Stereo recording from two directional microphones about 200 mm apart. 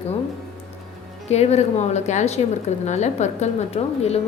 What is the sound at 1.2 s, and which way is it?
A woman's voice, 35° left (ahead or behind).